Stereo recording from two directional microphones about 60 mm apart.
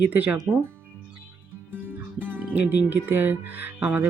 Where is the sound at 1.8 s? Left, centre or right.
Right.